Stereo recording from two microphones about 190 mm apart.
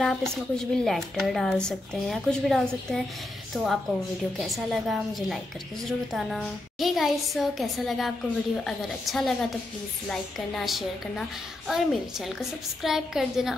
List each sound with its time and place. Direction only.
0.0 s a woman's voice: 5° left (ahead or behind)